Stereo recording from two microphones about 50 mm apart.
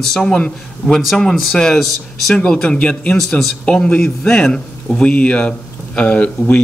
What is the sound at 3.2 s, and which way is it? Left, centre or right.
Speech, centre.